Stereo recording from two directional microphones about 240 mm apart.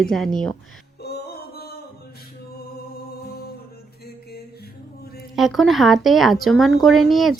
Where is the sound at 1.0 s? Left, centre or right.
Left.